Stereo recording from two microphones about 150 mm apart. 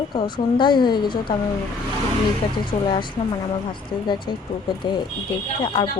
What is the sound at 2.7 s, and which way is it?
Speech, 45° left (ahead or behind).